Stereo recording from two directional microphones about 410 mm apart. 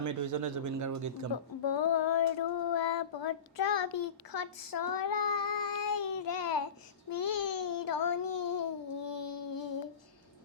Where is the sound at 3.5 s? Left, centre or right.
Left.